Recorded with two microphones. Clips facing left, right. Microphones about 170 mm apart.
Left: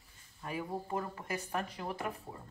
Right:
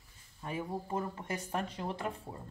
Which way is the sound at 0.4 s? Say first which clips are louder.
Right 1 dB; 20° right (ahead or behind).